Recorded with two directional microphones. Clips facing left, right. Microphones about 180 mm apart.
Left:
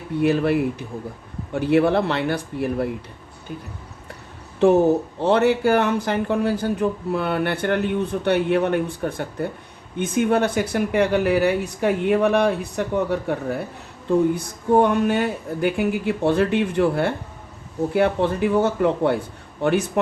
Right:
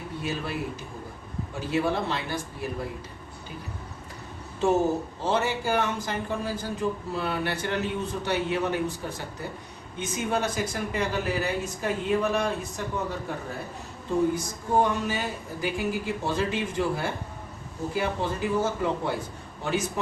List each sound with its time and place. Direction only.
0.2 s speech: 60° left (ahead or behind)
4.6 s speech: 60° left (ahead or behind)